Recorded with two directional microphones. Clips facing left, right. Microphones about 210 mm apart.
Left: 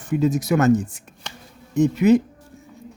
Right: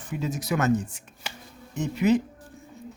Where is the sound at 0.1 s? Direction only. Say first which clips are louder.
Left 9 dB; 45° left (ahead or behind).